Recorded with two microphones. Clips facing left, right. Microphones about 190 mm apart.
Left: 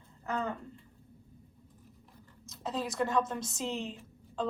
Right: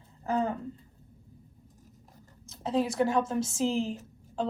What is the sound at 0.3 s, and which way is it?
Speech, 35° right (ahead or behind).